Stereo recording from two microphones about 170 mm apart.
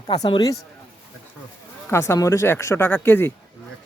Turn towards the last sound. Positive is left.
turn(degrees=15)  # may be behind; listen again after turning